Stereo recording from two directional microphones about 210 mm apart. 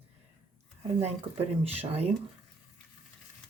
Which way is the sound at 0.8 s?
30° right (ahead or behind).